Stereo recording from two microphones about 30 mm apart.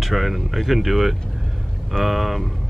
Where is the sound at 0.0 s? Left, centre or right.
Centre.